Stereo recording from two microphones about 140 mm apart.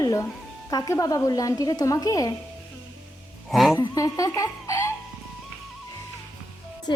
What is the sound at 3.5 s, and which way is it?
Speech, centre (ahead or behind).